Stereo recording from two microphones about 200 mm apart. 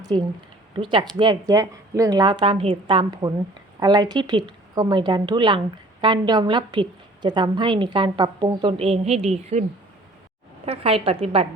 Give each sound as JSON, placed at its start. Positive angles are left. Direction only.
{"t": 0.0, "sound": "a woman's voice", "side_deg": -20}
{"t": 10.7, "sound": "a woman's voice", "side_deg": -30}